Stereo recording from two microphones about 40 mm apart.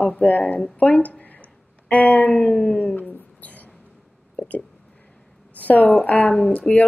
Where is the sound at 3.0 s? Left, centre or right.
Left.